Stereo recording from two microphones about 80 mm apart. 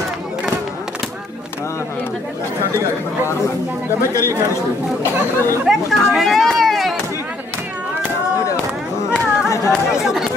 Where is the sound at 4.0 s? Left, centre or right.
Left.